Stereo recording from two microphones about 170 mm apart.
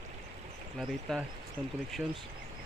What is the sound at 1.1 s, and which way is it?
Speech, centre (ahead or behind).